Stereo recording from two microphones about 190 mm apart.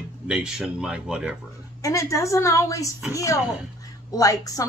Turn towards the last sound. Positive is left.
turn(degrees=20)  # may be behind; listen again after turning